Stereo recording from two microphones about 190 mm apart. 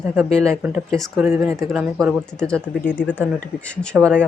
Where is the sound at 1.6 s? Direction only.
Centre (ahead or behind).